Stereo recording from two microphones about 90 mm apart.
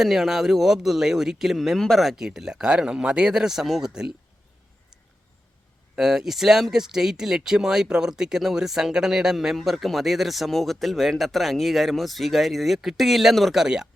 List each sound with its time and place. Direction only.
0.0 s speech: 5° right (ahead or behind)
6.0 s speech: 5° right (ahead or behind)